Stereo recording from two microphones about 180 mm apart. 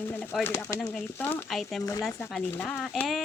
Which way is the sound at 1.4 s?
Centre (ahead or behind).